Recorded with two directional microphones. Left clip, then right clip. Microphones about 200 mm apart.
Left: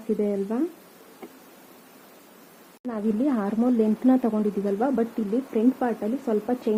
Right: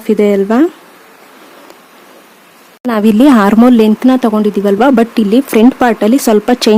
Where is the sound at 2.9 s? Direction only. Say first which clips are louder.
Right 18 dB; 60° right (ahead or behind).